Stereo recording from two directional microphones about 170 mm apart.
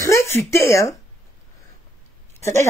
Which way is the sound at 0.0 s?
15° left (ahead or behind).